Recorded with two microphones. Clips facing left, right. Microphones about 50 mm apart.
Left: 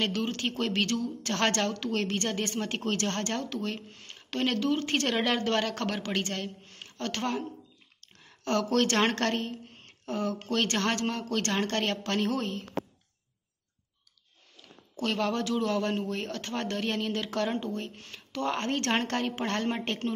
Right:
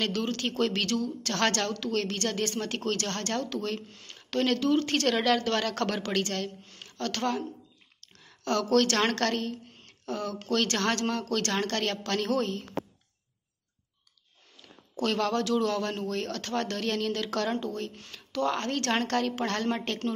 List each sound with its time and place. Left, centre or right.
0.0 s a man's voice: centre
3.9 s a sound: left
4.2 s a woman's voice: centre
15.0 s a man's voice: centre